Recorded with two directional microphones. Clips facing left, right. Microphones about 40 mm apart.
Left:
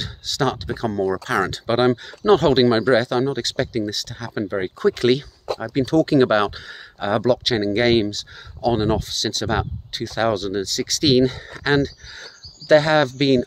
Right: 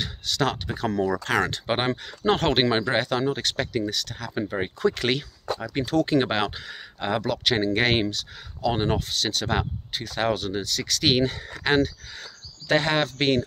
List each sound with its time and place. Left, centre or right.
0.0 s speech: right
1.7 s speech: centre
7.2 s speech: right; by 13.4 s centre